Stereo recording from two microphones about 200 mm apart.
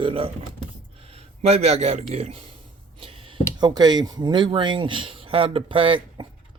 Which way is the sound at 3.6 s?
20° right (ahead or behind).